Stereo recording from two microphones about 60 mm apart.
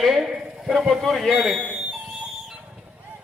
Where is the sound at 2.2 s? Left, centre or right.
Centre.